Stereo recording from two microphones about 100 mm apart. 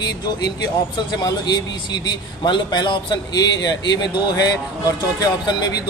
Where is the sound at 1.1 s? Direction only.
45° left (ahead or behind).